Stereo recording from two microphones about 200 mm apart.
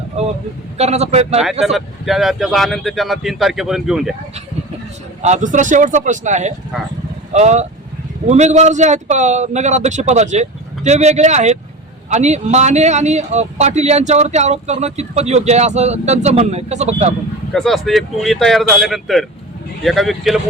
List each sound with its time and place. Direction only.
0.8 s a man's voice: 30° right (ahead or behind)
1.6 s speech: centre (ahead or behind)
5.2 s a man's voice: 35° right (ahead or behind)
6.7 s speech: 5° right (ahead or behind)
7.3 s a man's voice: 35° right (ahead or behind)
17.5 s speech: centre (ahead or behind)